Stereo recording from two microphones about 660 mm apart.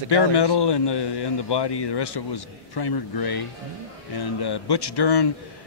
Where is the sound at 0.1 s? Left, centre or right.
Left.